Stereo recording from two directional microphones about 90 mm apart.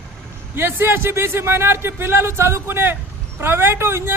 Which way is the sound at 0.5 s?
25° right (ahead or behind).